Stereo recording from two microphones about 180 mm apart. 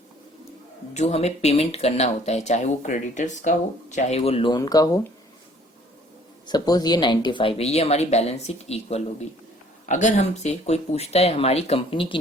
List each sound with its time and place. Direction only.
0.9 s speech: 35° left (ahead or behind); by 5.0 s 20° left (ahead or behind)
6.4 s speech: 20° left (ahead or behind)